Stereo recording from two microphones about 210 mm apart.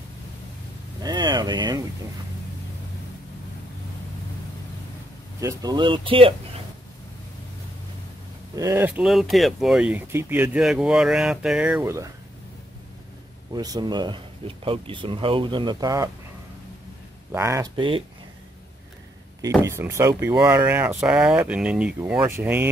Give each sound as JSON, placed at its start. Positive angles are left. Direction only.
{"t": 1.0, "sound": "a sound", "side_deg": -20}
{"t": 5.4, "sound": "speech", "side_deg": -15}
{"t": 8.5, "sound": "speech", "side_deg": -10}
{"t": 13.5, "sound": "speech", "side_deg": -20}
{"t": 17.3, "sound": "speech", "side_deg": -15}
{"t": 19.6, "sound": "speech", "side_deg": -10}